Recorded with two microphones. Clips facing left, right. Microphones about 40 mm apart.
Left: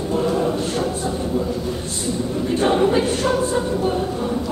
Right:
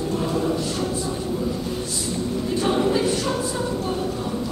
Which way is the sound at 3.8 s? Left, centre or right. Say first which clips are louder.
Left 4 dB; left.